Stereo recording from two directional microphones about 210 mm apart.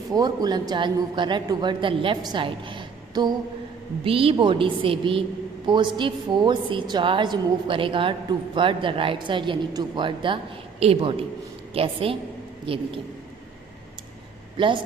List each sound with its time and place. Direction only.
0.1 s a woman's voice: 20° right (ahead or behind)
14.6 s a woman's voice: 25° right (ahead or behind)